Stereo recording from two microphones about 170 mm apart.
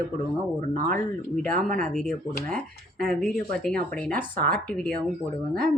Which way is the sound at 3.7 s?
60° right (ahead or behind).